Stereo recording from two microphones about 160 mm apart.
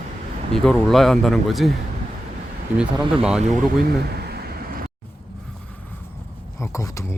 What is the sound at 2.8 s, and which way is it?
Speech, 5° right (ahead or behind).